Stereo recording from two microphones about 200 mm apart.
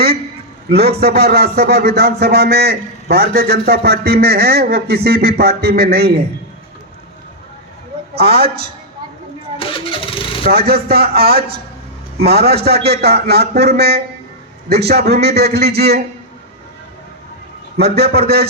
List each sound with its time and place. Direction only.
0.7 s a man's voice: 50° right (ahead or behind)
8.1 s a man's voice: 50° right (ahead or behind)
9.6 s vehicle: 25° left (ahead or behind)
10.4 s a man's voice: 50° right (ahead or behind)
17.7 s a man's voice: 50° right (ahead or behind)